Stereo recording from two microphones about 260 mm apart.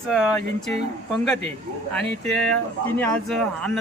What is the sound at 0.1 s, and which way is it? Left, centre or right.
Speech, centre.